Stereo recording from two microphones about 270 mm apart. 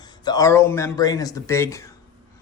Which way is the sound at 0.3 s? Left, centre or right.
Centre.